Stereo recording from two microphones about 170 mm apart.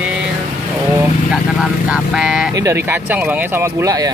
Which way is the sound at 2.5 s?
15° right (ahead or behind).